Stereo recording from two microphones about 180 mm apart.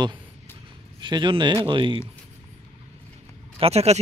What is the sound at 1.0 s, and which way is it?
Speech, 25° right (ahead or behind).